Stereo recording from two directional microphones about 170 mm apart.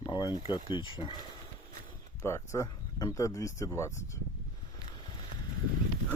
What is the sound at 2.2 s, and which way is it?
Speech, 15° left (ahead or behind).